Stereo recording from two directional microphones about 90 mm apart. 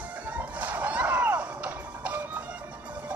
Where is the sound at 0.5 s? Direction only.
15° right (ahead or behind).